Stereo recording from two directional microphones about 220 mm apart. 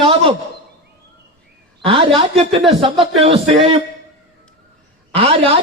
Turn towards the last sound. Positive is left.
turn(degrees=-25)  # may be behind; listen again after turning